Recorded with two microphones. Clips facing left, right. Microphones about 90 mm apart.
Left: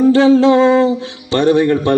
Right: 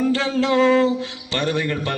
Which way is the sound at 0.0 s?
30° left (ahead or behind).